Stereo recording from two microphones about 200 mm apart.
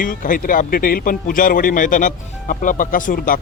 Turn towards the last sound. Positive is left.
turn(degrees=45)  # may be behind; listen again after turning